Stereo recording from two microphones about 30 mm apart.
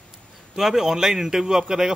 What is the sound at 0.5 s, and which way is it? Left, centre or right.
Speech, centre.